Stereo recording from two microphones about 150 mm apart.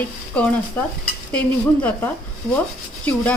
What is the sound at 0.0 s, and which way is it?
Stir, 10° left (ahead or behind).